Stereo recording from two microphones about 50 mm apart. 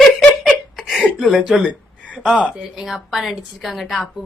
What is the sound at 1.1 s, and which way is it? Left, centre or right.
Speech, centre.